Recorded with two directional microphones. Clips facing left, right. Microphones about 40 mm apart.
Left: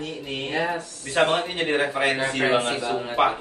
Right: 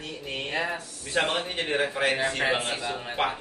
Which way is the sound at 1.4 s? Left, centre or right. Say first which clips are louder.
Left 4 dB; centre.